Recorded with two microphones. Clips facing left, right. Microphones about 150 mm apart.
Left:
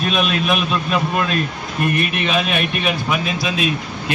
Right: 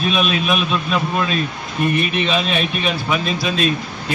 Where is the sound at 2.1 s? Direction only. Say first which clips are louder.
Right 1 dB; 55° left (ahead or behind).